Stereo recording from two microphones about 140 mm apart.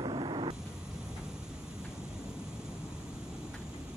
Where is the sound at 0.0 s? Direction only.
35° right (ahead or behind).